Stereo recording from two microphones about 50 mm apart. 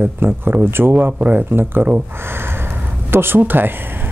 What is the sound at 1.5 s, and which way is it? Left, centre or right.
Speech, right.